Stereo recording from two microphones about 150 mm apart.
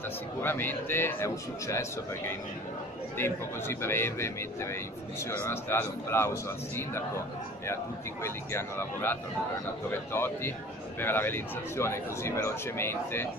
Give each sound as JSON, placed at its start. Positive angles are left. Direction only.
{"t": 0.4, "sound": "speech", "side_deg": 15}
{"t": 7.6, "sound": "speech", "side_deg": 15}